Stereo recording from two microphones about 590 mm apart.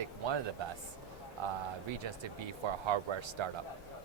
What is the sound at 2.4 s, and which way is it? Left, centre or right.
Speech, right.